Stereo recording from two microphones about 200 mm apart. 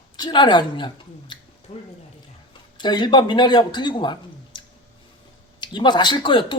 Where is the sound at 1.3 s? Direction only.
25° left (ahead or behind).